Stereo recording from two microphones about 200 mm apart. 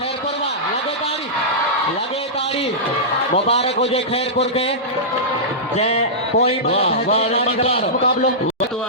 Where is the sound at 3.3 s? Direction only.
30° left (ahead or behind).